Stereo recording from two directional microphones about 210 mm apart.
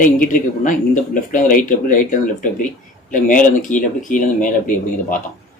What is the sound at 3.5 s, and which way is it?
Speech, 35° left (ahead or behind).